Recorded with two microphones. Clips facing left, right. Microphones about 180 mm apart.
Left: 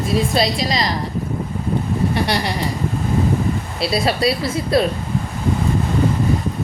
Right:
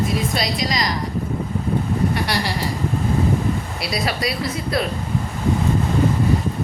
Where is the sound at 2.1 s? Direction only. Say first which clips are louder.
Left 3 dB; 25° left (ahead or behind).